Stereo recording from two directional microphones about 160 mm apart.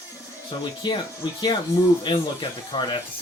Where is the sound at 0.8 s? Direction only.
30° left (ahead or behind).